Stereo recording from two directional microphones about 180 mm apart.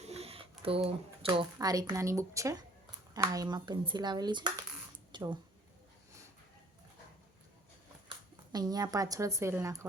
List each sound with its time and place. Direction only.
0.0 s a sound: 35° right (ahead or behind)
1.5 s a woman's voice: 20° right (ahead or behind)
8.5 s speech: 20° right (ahead or behind)